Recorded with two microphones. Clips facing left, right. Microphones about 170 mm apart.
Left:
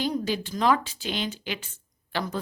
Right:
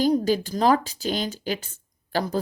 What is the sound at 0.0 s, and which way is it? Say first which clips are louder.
A woman's voice: right 7 dB; 40° right (ahead or behind).